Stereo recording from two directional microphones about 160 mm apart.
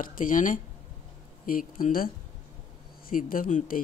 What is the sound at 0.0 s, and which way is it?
Speech, 55° left (ahead or behind).